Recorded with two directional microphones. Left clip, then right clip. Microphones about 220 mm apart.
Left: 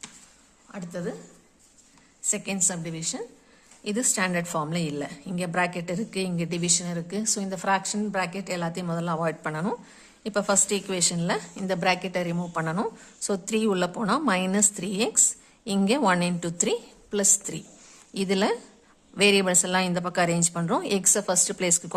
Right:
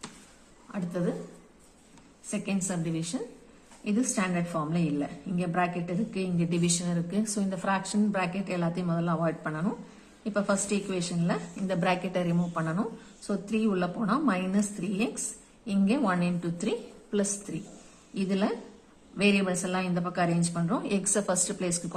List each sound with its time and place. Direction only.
0.7 s speech: 30° left (ahead or behind)
2.3 s a woman's voice: 35° left (ahead or behind)